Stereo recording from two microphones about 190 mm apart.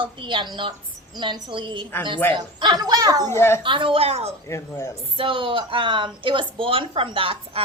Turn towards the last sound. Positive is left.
turn(degrees=-30)  # may be behind; listen again after turning